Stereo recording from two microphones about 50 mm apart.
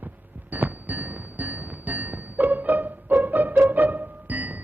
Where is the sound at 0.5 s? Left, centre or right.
Right.